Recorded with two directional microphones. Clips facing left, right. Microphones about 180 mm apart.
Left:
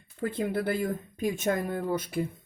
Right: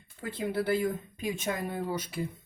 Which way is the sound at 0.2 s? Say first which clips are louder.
Left 3 dB; 55° left (ahead or behind).